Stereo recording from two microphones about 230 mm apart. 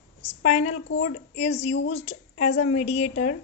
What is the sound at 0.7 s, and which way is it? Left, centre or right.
Speech, left.